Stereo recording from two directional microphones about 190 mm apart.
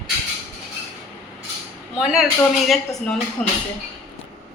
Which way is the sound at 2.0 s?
Centre (ahead or behind).